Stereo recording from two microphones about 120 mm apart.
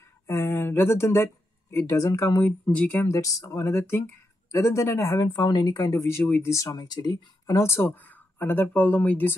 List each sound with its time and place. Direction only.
0.3 s speech: 20° left (ahead or behind)
2.6 s speech: 10° left (ahead or behind)
3.2 s speech: 30° left (ahead or behind)